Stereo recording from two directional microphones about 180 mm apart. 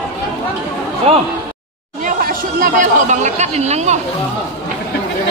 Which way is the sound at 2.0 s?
50° right (ahead or behind).